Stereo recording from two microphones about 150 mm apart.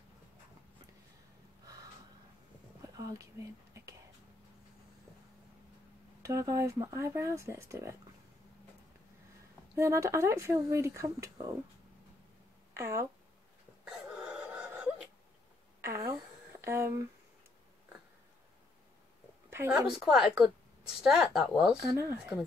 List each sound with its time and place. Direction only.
2.8 s whispering: 20° right (ahead or behind)
6.2 s speech: 20° right (ahead or behind)
9.8 s speech: 20° right (ahead or behind)
12.7 s speech: 20° right (ahead or behind)
13.8 s wail: 5° right (ahead or behind)
15.8 s speech: 20° right (ahead or behind)
19.7 s a woman's voice: 5° right (ahead or behind)
21.9 s speech: 15° right (ahead or behind)